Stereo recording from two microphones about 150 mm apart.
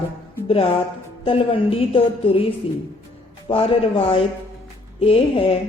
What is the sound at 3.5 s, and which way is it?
A woman's voice, 40° left (ahead or behind).